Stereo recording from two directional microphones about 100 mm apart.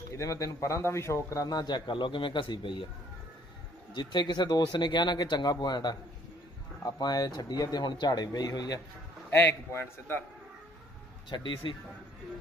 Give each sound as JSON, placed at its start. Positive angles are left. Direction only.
{"t": 0.1, "sound": "speech", "side_deg": 35}
{"t": 1.5, "sound": "speech", "side_deg": 45}
{"t": 3.9, "sound": "speech", "side_deg": 45}
{"t": 9.3, "sound": "a man's voice", "side_deg": 25}
{"t": 11.2, "sound": "speech", "side_deg": 50}